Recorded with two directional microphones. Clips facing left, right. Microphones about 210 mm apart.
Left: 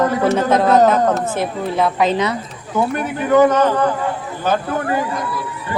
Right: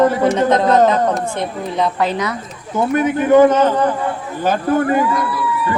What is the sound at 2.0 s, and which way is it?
Speech, 25° left (ahead or behind).